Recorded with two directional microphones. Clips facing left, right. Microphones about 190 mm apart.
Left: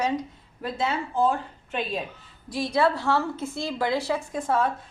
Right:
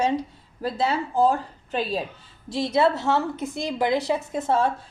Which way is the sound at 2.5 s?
25° right (ahead or behind).